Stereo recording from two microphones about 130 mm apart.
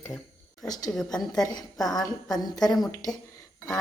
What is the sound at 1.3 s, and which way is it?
A woman's voice, 30° left (ahead or behind).